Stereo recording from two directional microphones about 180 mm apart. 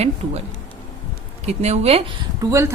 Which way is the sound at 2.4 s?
15° right (ahead or behind).